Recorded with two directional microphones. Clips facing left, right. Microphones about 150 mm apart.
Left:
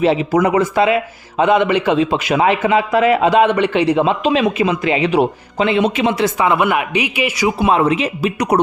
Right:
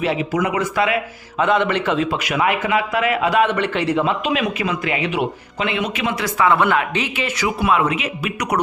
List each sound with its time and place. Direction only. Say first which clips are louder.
0.0 s a man's voice: left 6 dB; 30° left (ahead or behind); by 7.4 s 10° left (ahead or behind)
7.4 s a man's voice: left 4 dB; 25° left (ahead or behind)